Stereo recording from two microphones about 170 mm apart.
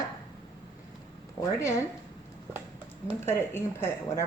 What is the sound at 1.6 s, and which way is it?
Speech, 15° left (ahead or behind).